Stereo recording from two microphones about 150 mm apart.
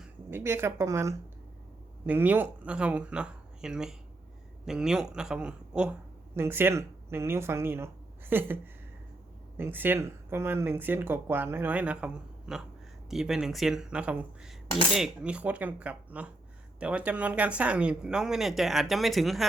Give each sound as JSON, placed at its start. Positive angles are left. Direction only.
{"t": 0.3, "sound": "speech", "side_deg": -15}
{"t": 9.6, "sound": "speech", "side_deg": -15}